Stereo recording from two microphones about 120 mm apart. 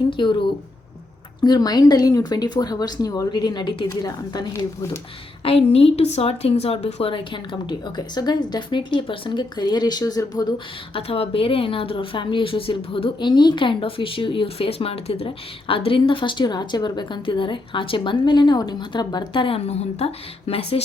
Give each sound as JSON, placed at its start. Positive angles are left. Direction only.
{"t": 0.1, "sound": "a woman's voice", "side_deg": 40}
{"t": 1.4, "sound": "a woman's voice", "side_deg": 35}
{"t": 5.4, "sound": "a woman's voice", "side_deg": 55}
{"t": 10.9, "sound": "a woman's voice", "side_deg": 50}